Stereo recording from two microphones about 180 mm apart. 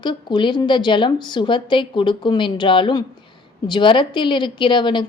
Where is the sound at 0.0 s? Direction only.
25° left (ahead or behind).